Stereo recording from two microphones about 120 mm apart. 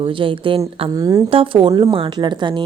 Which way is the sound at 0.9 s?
30° right (ahead or behind).